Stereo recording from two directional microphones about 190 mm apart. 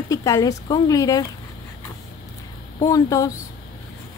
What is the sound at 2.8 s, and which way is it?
Speech, 15° left (ahead or behind).